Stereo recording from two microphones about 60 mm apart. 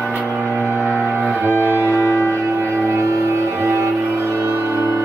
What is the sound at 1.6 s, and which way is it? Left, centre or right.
Music, right.